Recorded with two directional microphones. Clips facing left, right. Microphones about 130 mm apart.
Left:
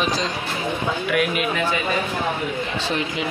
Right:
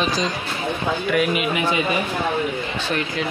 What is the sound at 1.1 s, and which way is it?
Speech, centre (ahead or behind).